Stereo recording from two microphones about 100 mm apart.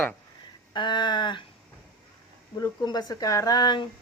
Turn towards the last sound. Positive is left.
turn(degrees=45)  # may be behind; listen again after turning